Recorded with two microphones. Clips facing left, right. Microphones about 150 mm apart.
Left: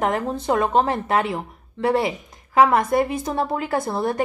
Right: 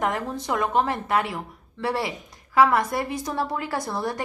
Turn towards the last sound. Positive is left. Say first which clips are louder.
# left 5 dB
turn(degrees=25)  # may be behind; listen again after turning